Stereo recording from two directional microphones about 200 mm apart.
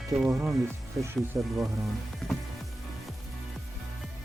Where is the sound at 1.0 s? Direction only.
10° right (ahead or behind).